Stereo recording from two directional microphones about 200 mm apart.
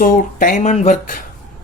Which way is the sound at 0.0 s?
45° left (ahead or behind).